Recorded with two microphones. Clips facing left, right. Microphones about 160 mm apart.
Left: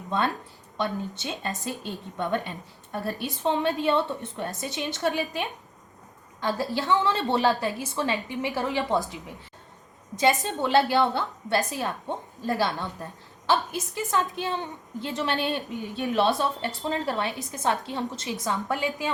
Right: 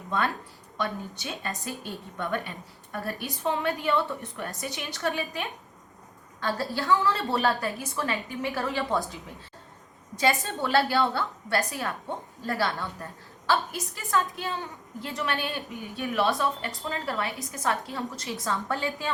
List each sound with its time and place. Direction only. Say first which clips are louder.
0.8 s a woman's voice: left 3 dB; 25° left (ahead or behind)
6.4 s a woman's voice: left 2 dB; 20° left (ahead or behind)
10.2 s a woman's voice: left 3 dB; 20° left (ahead or behind)